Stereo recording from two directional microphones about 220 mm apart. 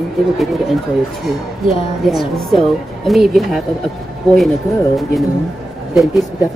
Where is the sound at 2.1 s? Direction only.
Centre (ahead or behind).